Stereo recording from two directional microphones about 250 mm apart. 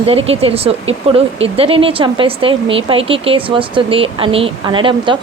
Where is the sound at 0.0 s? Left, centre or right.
Right.